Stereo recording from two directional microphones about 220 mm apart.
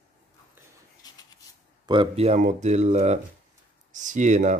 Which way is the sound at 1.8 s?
25° right (ahead or behind).